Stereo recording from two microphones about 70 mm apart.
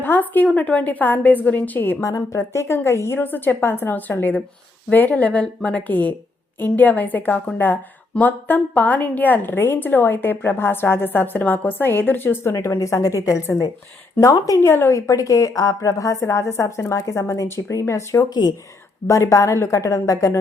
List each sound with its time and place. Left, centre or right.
0.0 s a woman's voice: left
2.0 s a woman's voice: left
12.6 s a woman's voice: left
14.6 s a woman's voice: left
14.9 s a woman's voice: left